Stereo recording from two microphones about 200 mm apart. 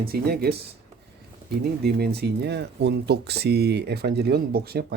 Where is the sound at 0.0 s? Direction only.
50° right (ahead or behind).